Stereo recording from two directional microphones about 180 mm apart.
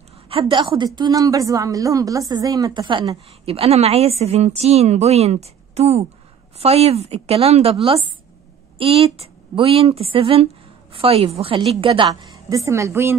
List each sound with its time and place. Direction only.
0.3 s a woman's voice: 30° right (ahead or behind)